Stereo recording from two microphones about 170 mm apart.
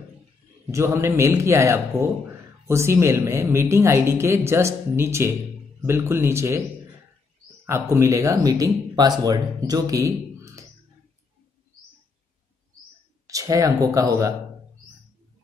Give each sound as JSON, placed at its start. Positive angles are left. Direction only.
{"t": 0.7, "sound": "speech", "side_deg": -15}
{"t": 7.9, "sound": "speech", "side_deg": -20}
{"t": 13.3, "sound": "speech", "side_deg": -20}